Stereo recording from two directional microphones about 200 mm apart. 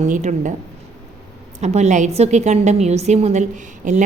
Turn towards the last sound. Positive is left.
turn(degrees=-40)  # may be behind; listen again after turning